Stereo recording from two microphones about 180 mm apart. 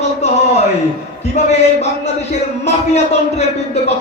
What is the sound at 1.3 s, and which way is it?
A man's voice, 35° left (ahead or behind).